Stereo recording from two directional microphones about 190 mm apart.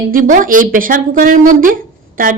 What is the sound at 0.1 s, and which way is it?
Speech, 45° right (ahead or behind).